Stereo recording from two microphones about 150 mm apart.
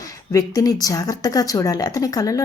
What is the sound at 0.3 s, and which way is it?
Speech, 25° left (ahead or behind).